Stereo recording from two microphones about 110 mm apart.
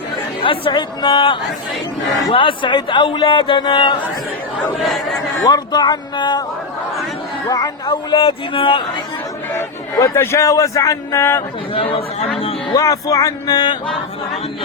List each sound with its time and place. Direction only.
0.4 s speech: 55° left (ahead or behind)
4.8 s speech: centre (ahead or behind)
5.5 s speech: 40° left (ahead or behind)
7.5 s speech: 35° left (ahead or behind)
8.1 s speech: 55° left (ahead or behind)
10.2 s a man's voice: 30° left (ahead or behind)
11.7 s speech: 55° left (ahead or behind)
12.7 s speech: 35° left (ahead or behind)